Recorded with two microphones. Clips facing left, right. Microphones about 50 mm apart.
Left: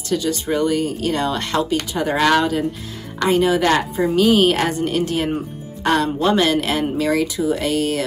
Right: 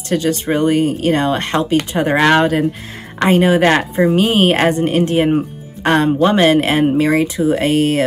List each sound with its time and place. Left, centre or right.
0.1 s speech: right